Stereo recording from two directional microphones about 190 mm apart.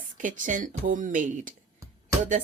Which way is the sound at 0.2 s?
45° right (ahead or behind).